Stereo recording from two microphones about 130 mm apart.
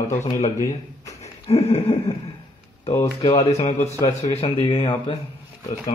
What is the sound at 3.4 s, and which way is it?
Speech, 55° left (ahead or behind).